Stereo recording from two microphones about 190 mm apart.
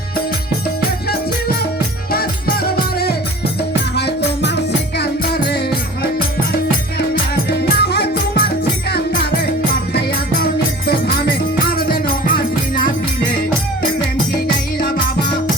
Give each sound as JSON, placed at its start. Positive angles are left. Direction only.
{"t": 2.1, "sound": "music", "side_deg": 55}
{"t": 7.8, "sound": "music", "side_deg": 55}